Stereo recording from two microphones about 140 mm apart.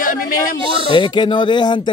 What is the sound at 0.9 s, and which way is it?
Speech, 35° left (ahead or behind).